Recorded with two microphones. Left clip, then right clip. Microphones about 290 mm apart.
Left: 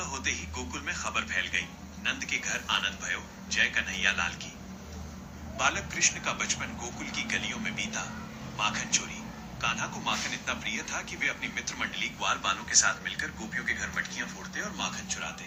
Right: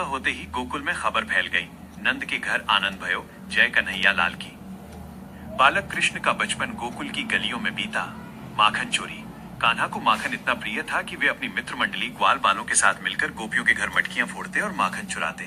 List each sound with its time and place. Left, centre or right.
0.0 s speech: right
5.5 s speech: right